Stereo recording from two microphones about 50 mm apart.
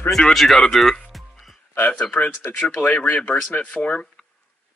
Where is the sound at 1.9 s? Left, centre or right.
Left.